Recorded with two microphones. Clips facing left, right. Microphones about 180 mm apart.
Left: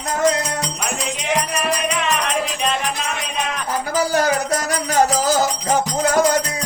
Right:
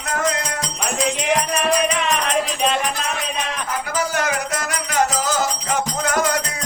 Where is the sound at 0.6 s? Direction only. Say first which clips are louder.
Right 2 dB; centre (ahead or behind).